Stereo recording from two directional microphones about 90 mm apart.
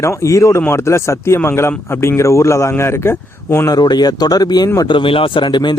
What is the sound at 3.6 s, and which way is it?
Speech, 50° left (ahead or behind).